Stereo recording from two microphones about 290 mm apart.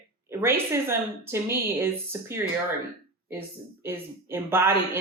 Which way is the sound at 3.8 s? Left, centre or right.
Centre.